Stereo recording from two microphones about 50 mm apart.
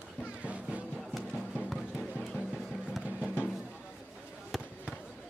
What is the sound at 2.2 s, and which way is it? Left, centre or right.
Music, centre.